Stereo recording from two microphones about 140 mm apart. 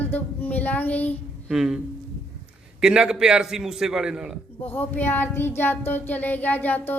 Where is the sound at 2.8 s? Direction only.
5° right (ahead or behind).